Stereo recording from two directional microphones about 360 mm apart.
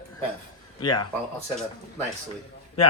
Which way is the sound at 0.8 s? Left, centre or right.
Centre.